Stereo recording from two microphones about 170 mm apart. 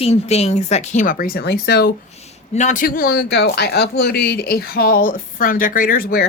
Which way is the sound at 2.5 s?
45° left (ahead or behind).